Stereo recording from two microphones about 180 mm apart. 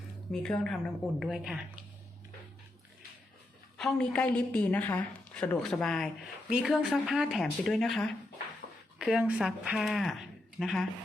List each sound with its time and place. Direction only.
0.3 s a woman's voice: 5° left (ahead or behind)
3.8 s a woman's voice: 5° left (ahead or behind)
8.6 s a sound: 65° left (ahead or behind)
9.0 s speech: 5° right (ahead or behind)